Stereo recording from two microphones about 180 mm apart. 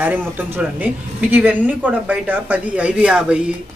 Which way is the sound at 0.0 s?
10° right (ahead or behind).